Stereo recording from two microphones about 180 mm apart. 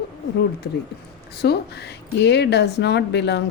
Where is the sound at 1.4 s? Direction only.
65° left (ahead or behind).